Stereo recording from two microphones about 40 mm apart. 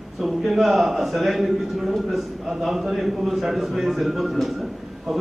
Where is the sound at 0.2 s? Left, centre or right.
Centre.